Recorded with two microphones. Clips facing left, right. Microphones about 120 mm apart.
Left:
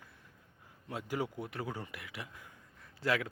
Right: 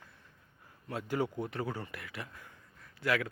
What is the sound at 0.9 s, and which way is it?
Speech, 15° left (ahead or behind).